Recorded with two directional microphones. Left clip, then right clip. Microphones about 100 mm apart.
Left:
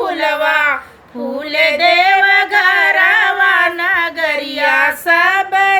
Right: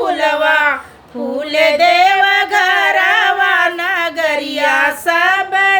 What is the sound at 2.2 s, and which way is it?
Music, 40° right (ahead or behind).